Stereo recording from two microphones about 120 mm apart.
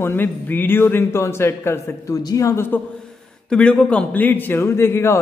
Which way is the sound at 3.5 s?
10° left (ahead or behind).